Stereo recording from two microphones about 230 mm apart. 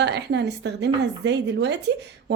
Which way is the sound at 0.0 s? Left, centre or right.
Right.